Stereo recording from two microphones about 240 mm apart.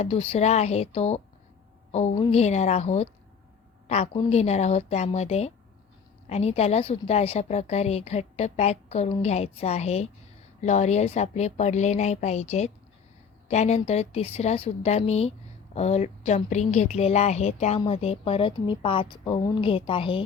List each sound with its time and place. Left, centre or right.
0.0 s a woman's voice: left